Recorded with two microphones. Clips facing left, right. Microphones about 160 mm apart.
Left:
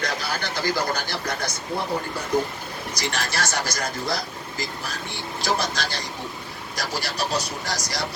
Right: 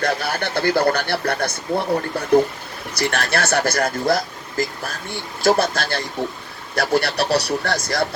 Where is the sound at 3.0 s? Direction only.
60° right (ahead or behind).